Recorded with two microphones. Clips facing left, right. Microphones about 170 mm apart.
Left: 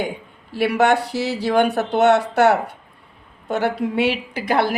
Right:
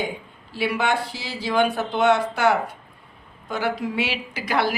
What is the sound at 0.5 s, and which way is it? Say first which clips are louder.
A woman's voice: left 6 dB; 65° left (ahead or behind).